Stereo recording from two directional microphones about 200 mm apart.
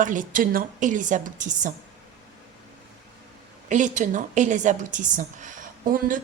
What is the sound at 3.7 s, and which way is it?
A woman's voice, 40° right (ahead or behind).